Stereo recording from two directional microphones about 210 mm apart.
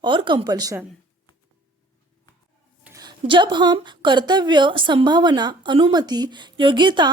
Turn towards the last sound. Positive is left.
turn(degrees=-20)  # may be behind; listen again after turning